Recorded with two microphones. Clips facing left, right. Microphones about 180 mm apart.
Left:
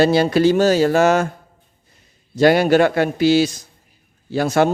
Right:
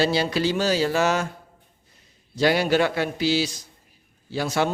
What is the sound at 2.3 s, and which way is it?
A man's voice, 50° left (ahead or behind).